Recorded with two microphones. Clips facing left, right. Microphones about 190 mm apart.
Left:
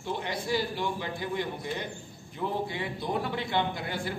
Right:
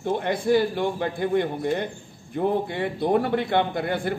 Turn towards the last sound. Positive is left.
turn(degrees=-55)  # may be behind; listen again after turning